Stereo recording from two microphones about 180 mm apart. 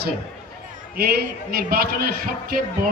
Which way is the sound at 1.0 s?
60° right (ahead or behind).